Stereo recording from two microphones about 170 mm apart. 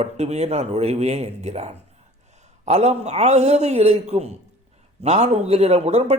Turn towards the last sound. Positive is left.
turn(degrees=-35)  # may be behind; listen again after turning